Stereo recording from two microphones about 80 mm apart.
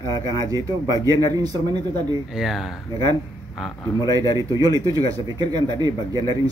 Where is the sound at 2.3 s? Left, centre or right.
Centre.